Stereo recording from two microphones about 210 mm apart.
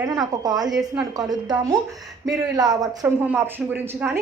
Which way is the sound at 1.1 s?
20° right (ahead or behind).